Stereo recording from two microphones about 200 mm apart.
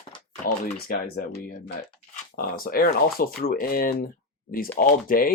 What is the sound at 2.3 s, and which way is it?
Speech, 50° left (ahead or behind).